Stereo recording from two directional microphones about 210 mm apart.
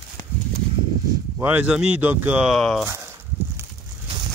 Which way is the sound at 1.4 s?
5° right (ahead or behind).